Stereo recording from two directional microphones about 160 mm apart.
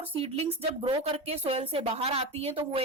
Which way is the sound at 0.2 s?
40° right (ahead or behind).